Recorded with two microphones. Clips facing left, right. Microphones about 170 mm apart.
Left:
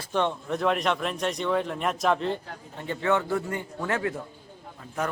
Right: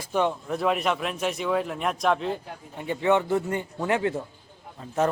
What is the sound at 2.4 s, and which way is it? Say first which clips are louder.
A man's voice: right 2 dB; 15° right (ahead or behind).